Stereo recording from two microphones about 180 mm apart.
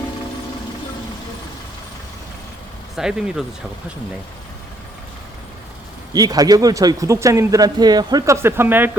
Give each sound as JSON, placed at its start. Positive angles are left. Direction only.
{"t": 2.9, "sound": "speech", "side_deg": -5}
{"t": 6.1, "sound": "speech", "side_deg": -20}